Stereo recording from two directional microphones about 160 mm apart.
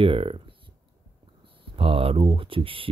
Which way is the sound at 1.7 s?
35° right (ahead or behind).